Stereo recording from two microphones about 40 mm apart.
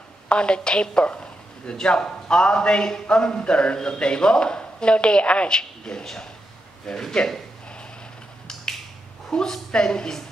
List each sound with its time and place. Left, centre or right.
0.3 s a woman's voice: left
8.5 s finger snapping: centre
9.3 s a woman's voice: centre